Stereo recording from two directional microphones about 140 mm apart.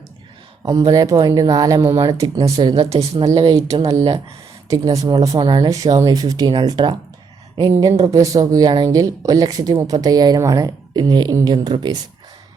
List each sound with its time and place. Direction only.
0.9 s speech: 25° right (ahead or behind)
2.6 s a woman's voice: 35° right (ahead or behind)
2.8 s a woman's voice: 50° right (ahead or behind)
3.4 s speech: 25° right (ahead or behind)